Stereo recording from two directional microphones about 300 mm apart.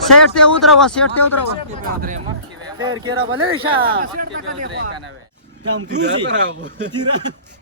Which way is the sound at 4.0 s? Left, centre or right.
Right.